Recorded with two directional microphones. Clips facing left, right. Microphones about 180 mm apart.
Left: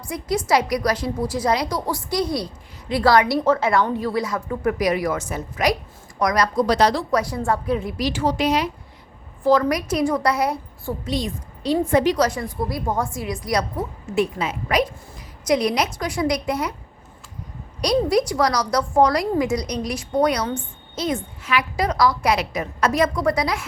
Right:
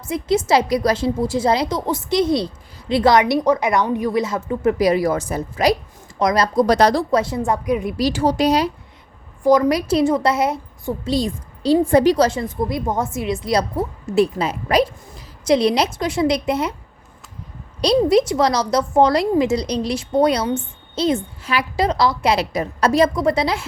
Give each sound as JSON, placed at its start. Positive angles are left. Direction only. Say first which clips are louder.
{"t": 0.1, "sound": "a woman's voice", "louder": "right 4 dB", "side_deg": -25}
{"t": 6.7, "sound": "speech", "louder": "right 4 dB", "side_deg": -45}
{"t": 7.1, "sound": "a woman's voice", "louder": "right 3 dB", "side_deg": -25}
{"t": 7.9, "sound": "speech", "louder": "right 4 dB", "side_deg": -35}
{"t": 9.4, "sound": "a woman's voice", "louder": "right 3 dB", "side_deg": -15}
{"t": 11.1, "sound": "a woman's voice", "louder": "right 6 dB", "side_deg": -35}
{"t": 17.7, "sound": "a woman's voice", "louder": "right 4 dB", "side_deg": -25}